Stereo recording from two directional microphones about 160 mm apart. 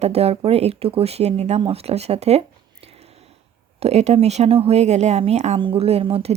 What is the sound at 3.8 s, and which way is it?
Speech, 40° right (ahead or behind).